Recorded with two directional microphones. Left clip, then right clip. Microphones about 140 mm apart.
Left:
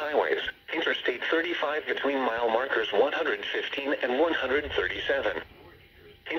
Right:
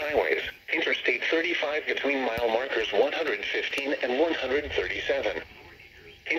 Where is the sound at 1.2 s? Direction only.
90° left.